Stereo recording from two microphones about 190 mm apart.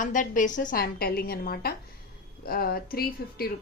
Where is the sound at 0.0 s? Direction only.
40° left (ahead or behind).